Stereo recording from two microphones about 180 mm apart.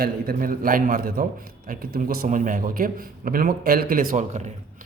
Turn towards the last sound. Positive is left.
turn(degrees=-45)  # may be behind; listen again after turning